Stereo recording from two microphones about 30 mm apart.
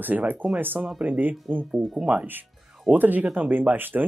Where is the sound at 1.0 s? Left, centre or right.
Right.